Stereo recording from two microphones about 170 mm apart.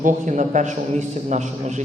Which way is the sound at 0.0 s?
45° right (ahead or behind).